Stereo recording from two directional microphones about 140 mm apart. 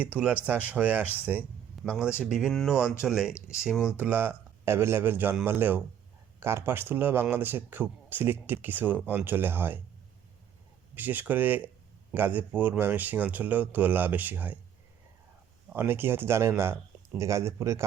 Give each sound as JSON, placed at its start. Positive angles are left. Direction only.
{"t": 0.0, "sound": "speech", "side_deg": -10}
{"t": 10.9, "sound": "speech", "side_deg": -10}
{"t": 15.7, "sound": "speech", "side_deg": -15}